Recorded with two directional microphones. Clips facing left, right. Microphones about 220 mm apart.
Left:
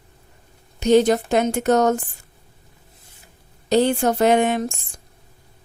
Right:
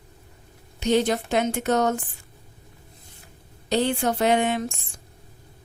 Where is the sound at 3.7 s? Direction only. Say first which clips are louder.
Left 5 dB; 40° left (ahead or behind).